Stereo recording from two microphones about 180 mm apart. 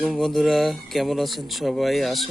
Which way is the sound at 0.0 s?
Centre (ahead or behind).